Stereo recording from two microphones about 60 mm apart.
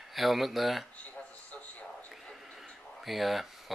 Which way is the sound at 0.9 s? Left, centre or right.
Left.